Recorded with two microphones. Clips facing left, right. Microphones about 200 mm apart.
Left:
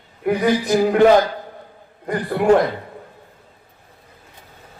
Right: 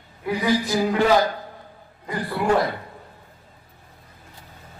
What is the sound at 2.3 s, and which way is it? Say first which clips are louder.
Speech: left 7 dB; 55° left (ahead or behind).